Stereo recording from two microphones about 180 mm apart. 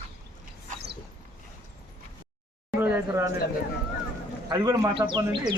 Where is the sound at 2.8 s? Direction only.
15° right (ahead or behind).